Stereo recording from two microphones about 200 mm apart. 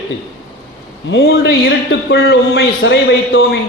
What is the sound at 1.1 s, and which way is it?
Speech, 65° left (ahead or behind).